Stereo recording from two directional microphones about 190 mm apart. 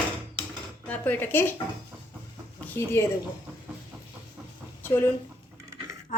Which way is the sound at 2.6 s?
10° left (ahead or behind).